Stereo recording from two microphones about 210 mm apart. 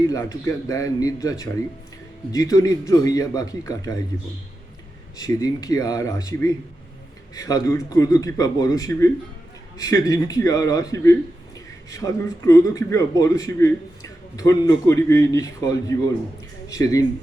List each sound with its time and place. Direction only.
0.1 s a man's voice: 15° left (ahead or behind)
5.1 s a man's voice: 15° left (ahead or behind)